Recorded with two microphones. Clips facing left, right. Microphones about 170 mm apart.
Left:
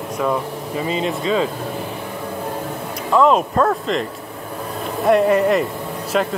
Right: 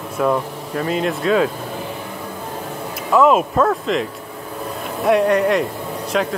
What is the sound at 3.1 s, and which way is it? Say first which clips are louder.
Speech: right 1 dB; 5° right (ahead or behind).